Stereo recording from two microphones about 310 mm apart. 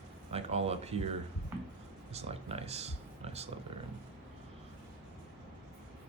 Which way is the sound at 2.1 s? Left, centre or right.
Centre.